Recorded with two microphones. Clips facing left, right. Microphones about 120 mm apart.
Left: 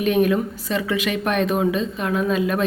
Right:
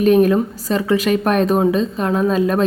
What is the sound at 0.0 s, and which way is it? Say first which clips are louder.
A woman's voice: right 6 dB; 40° right (ahead or behind).